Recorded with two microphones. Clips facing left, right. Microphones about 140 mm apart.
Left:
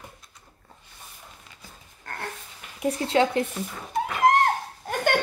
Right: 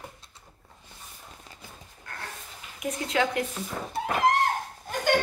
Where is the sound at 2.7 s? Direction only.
30° left (ahead or behind).